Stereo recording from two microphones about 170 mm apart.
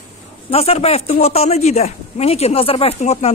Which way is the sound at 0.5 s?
35° left (ahead or behind).